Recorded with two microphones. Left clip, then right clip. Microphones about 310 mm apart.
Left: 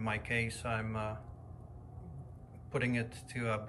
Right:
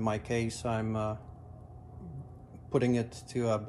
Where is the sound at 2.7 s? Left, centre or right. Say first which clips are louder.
Right 6 dB; centre.